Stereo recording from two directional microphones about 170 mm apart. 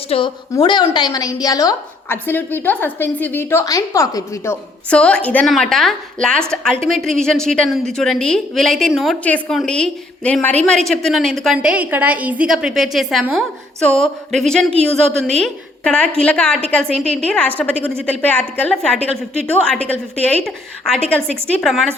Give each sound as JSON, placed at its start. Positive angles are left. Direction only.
{"t": 0.1, "sound": "a woman's voice", "side_deg": 35}
{"t": 4.9, "sound": "a woman's voice", "side_deg": 5}